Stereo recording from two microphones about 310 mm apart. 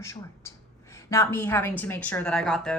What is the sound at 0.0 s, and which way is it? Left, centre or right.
A woman's voice, centre.